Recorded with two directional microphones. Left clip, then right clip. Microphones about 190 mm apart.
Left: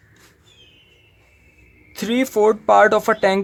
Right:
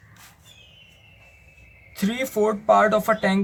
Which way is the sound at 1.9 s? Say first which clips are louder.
Left 6 dB; 50° left (ahead or behind).